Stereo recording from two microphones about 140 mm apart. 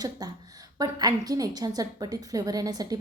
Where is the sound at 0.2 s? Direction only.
30° right (ahead or behind).